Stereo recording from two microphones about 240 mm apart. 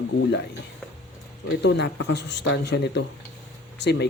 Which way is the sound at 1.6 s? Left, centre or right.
Left.